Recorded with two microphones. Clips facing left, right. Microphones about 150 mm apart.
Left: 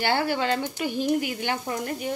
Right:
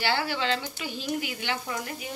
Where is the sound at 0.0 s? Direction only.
50° left (ahead or behind).